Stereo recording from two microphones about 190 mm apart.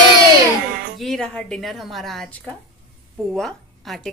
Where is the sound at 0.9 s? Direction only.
Centre (ahead or behind).